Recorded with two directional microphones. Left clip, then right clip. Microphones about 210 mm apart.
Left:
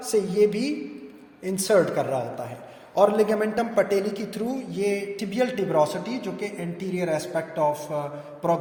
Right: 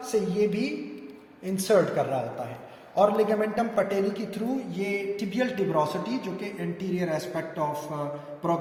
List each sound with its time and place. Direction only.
0.1 s a man's voice: 40° left (ahead or behind)